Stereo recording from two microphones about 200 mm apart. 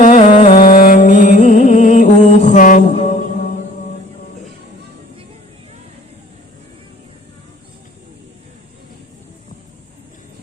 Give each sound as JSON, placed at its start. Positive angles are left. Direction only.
{"t": 0.0, "sound": "music", "side_deg": 40}